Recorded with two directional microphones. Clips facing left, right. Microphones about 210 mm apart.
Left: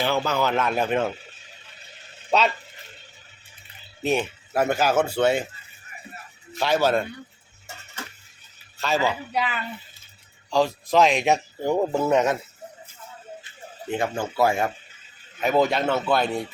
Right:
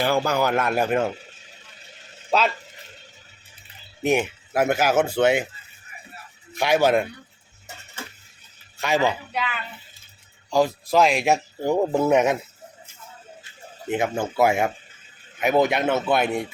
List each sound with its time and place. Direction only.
0.0 s speech: 10° right (ahead or behind)
4.0 s speech: 10° right (ahead or behind)
6.5 s speech: 15° right (ahead or behind)
8.8 s speech: 15° right (ahead or behind)
10.5 s speech: 5° right (ahead or behind)
13.9 s speech: 20° right (ahead or behind)